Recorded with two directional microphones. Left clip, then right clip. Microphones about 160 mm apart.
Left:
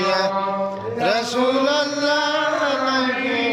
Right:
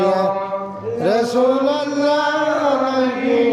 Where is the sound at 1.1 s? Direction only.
35° right (ahead or behind).